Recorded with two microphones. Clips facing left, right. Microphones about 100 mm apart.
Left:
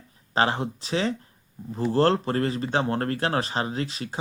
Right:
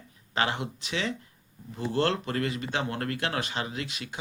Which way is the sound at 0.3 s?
35° left (ahead or behind).